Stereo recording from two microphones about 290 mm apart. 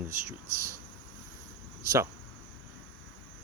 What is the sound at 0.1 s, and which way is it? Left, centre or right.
Speech, centre.